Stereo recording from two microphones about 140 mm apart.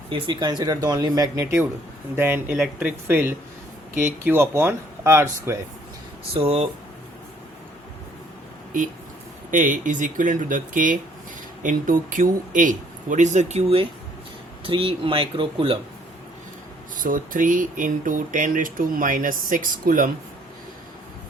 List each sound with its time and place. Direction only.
0.1 s speech: 30° right (ahead or behind)
6.3 s speech: 45° right (ahead or behind)
9.5 s speech: 70° right (ahead or behind); by 15.8 s 40° right (ahead or behind)
17.0 s speech: 70° right (ahead or behind)